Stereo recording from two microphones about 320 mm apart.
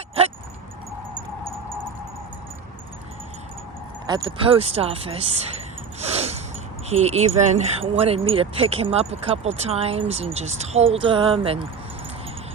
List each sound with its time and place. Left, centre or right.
4.0 s speech: centre
6.0 s a sound: centre
6.9 s speech: centre